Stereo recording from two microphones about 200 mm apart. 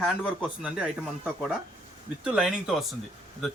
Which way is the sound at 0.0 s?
5° right (ahead or behind).